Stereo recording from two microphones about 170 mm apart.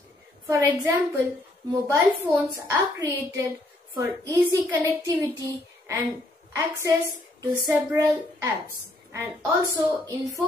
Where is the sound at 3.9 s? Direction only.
20° right (ahead or behind).